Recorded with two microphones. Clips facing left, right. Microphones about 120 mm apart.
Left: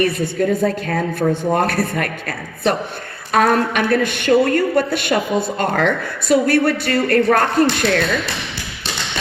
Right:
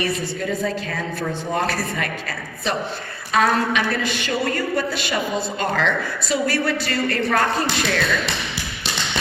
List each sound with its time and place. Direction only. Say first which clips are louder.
0.0 s a woman's voice: left 7 dB; 50° left (ahead or behind)